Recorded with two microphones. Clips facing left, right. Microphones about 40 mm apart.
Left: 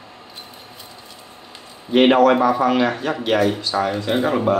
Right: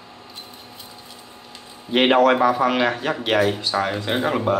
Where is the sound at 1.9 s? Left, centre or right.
Centre.